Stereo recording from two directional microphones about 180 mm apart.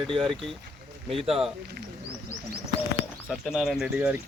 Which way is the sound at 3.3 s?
Centre (ahead or behind).